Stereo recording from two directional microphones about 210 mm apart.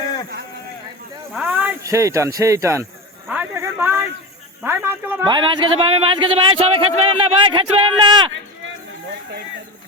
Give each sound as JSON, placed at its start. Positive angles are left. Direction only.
{"t": 1.3, "sound": "speech", "side_deg": -5}
{"t": 3.2, "sound": "a sound", "side_deg": -10}
{"t": 4.6, "sound": "speech", "side_deg": -10}
{"t": 5.2, "sound": "speech", "side_deg": -25}